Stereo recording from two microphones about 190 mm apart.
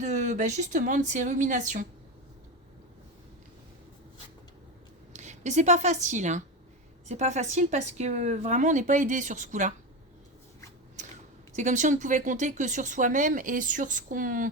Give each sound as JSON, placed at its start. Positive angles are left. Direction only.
{"t": 0.0, "sound": "speech", "side_deg": -40}
{"t": 5.1, "sound": "a woman's voice", "side_deg": -40}
{"t": 11.5, "sound": "speech", "side_deg": -40}